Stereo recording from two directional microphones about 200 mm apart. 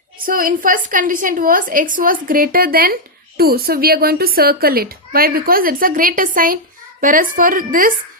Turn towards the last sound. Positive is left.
turn(degrees=-45)  # may be behind; listen again after turning